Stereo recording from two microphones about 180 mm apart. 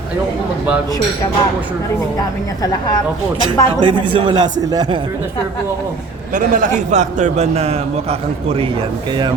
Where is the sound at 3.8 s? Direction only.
30° right (ahead or behind).